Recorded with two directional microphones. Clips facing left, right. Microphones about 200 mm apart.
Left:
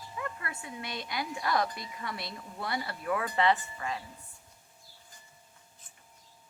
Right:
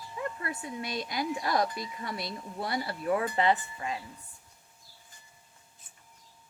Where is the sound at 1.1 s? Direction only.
25° right (ahead or behind).